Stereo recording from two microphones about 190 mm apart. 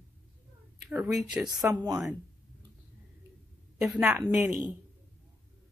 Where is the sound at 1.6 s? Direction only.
15° right (ahead or behind).